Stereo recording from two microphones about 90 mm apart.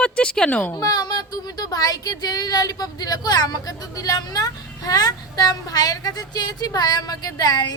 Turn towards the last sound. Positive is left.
turn(degrees=50)  # may be behind; listen again after turning